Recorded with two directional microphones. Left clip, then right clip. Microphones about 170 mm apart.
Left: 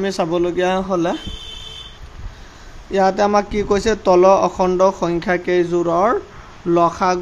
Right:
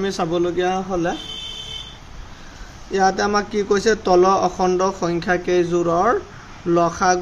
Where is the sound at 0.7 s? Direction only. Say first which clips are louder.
Left 3 dB; 50° left (ahead or behind).